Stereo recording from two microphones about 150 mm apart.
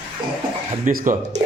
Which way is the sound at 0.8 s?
60° right (ahead or behind).